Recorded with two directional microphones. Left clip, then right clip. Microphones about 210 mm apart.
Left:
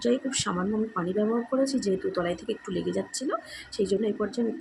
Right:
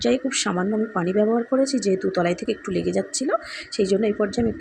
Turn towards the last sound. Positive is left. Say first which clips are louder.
# right 6 dB
turn(degrees=-15)  # may be behind; listen again after turning